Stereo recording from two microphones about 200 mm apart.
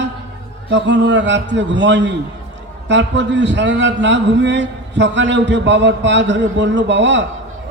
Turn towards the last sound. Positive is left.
turn(degrees=-65)  # may be behind; listen again after turning